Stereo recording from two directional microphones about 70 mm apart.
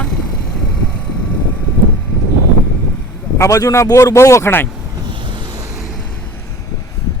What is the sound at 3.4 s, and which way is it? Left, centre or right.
Speech, left.